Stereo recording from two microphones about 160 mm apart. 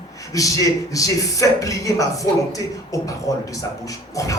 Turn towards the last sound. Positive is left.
turn(degrees=20)  # may be behind; listen again after turning